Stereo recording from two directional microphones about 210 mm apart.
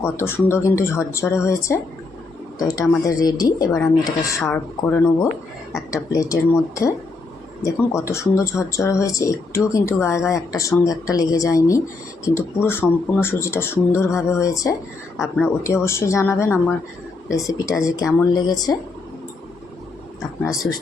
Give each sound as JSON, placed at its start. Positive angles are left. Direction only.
{"t": 0.0, "sound": "speech", "side_deg": 10}